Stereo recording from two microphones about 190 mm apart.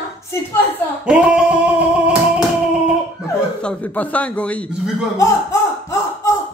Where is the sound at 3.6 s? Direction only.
5° left (ahead or behind).